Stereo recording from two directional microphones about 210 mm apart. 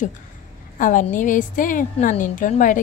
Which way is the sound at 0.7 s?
40° left (ahead or behind).